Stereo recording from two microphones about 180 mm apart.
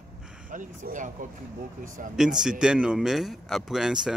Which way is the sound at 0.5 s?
45° right (ahead or behind).